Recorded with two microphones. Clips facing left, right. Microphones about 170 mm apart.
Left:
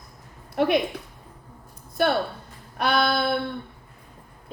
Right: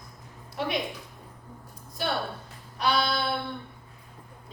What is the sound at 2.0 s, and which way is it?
A woman's voice, 55° left (ahead or behind).